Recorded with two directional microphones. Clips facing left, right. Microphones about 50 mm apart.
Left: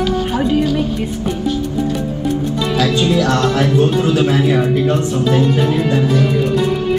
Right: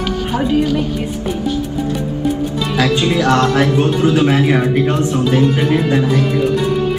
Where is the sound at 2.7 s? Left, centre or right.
Right.